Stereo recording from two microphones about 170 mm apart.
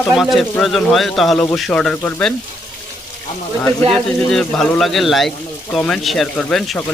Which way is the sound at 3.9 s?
5° left (ahead or behind).